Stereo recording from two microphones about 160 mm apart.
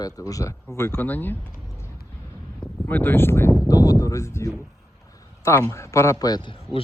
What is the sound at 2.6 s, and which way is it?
A man's voice, 10° left (ahead or behind).